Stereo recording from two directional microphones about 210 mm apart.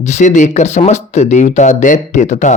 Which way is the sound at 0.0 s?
35° left (ahead or behind).